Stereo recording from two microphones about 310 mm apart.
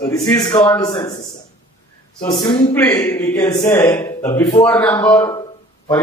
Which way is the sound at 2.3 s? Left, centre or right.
Centre.